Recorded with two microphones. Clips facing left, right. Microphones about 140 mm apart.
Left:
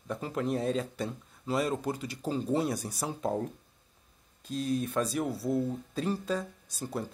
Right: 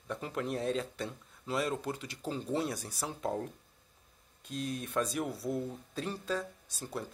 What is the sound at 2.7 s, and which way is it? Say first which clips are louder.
Speech: left 5 dB; 15° left (ahead or behind).